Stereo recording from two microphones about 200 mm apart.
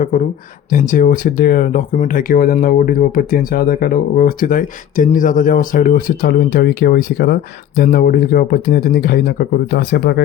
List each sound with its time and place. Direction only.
0.7 s speech: 40° left (ahead or behind)